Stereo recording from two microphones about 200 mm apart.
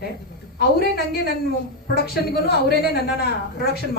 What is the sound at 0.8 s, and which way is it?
Speech, 55° left (ahead or behind).